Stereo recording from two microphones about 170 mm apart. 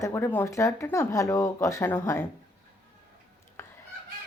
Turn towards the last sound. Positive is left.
turn(degrees=15)  # may be behind; listen again after turning